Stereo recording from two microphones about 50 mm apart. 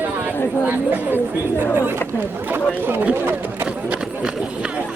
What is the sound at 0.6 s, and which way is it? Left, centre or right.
Speech, right.